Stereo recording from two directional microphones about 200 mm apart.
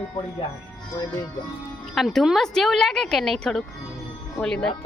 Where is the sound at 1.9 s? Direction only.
Centre (ahead or behind).